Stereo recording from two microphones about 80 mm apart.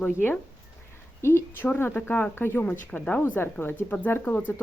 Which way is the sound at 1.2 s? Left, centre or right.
Left.